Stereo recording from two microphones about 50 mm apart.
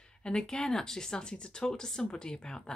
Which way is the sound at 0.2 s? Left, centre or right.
Centre.